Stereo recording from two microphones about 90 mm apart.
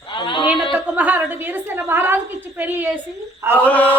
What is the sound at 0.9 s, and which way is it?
A woman's voice, 15° right (ahead or behind).